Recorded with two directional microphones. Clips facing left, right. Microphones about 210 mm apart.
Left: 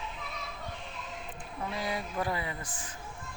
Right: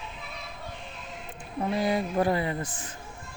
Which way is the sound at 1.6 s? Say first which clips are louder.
Right 9 dB; 55° right (ahead or behind).